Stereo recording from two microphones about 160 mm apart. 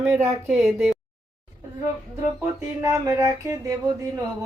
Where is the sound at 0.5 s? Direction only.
Centre (ahead or behind).